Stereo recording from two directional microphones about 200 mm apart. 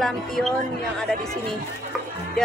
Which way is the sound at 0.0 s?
Centre (ahead or behind).